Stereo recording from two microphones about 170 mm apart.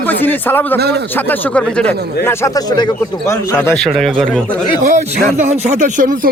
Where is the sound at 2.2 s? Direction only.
20° left (ahead or behind).